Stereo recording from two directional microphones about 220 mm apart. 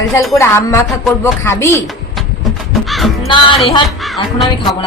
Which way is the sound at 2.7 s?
Centre (ahead or behind).